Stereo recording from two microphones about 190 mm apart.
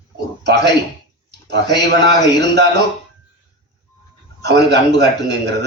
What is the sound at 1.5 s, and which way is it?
Speech, 20° left (ahead or behind).